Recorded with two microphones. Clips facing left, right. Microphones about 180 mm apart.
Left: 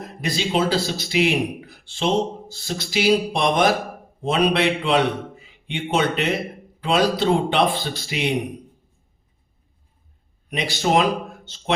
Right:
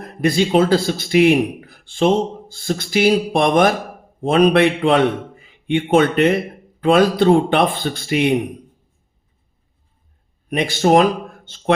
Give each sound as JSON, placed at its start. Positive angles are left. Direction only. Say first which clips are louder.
{"t": 0.0, "sound": "a man's voice", "louder": "right 8 dB", "side_deg": -55}
{"t": 10.5, "sound": "a man's voice", "louder": "right 6 dB", "side_deg": -50}